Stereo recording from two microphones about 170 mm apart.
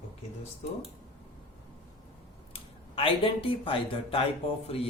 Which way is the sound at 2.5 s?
30° left (ahead or behind).